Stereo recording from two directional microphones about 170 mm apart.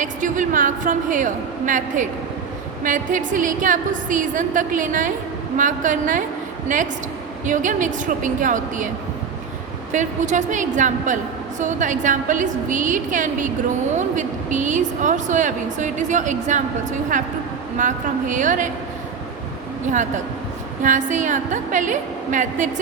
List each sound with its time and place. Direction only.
0.0 s a woman's voice: 50° right (ahead or behind)
9.9 s a woman's voice: 45° right (ahead or behind)
17.7 s a woman's voice: 50° right (ahead or behind)
20.8 s a woman's voice: 45° right (ahead or behind)